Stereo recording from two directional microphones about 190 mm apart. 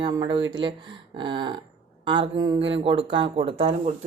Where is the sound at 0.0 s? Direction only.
20° right (ahead or behind).